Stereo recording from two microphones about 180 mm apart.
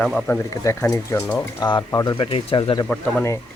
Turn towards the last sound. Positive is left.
turn(degrees=10)  # may be behind; listen again after turning